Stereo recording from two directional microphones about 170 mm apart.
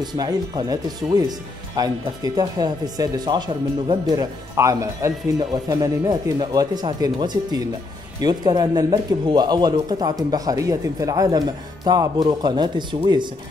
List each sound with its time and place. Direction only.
0.0 s speech: 25° right (ahead or behind)